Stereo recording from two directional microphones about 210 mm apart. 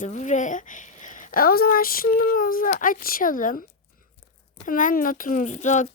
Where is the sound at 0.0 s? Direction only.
35° left (ahead or behind).